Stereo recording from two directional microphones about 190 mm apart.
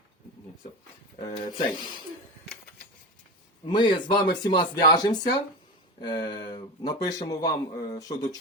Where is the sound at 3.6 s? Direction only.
25° left (ahead or behind).